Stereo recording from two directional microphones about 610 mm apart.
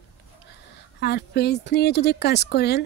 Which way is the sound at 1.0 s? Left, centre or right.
Centre.